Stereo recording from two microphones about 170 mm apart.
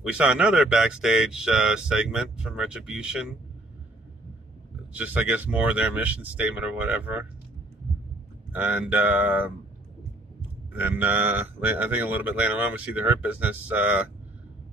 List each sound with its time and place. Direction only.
0.0 s speech: 5° right (ahead or behind)
4.9 s speech: 10° right (ahead or behind)
8.5 s speech: 10° right (ahead or behind)
10.7 s speech: 10° right (ahead or behind)